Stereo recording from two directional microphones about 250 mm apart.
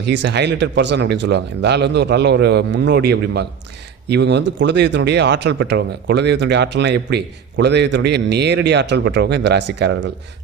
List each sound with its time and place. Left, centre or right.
0.0 s speech: right